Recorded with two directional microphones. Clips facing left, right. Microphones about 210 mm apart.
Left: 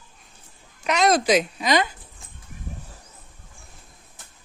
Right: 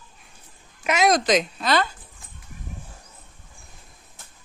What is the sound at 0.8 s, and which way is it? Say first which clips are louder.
Speech: even; 5° right (ahead or behind).